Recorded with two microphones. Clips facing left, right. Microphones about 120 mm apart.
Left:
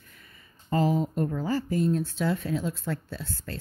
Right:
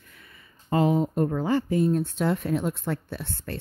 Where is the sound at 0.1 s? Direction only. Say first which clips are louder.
Right 5 dB; 40° left (ahead or behind).